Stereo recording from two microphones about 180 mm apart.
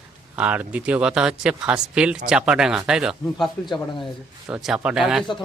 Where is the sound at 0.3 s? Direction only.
10° right (ahead or behind).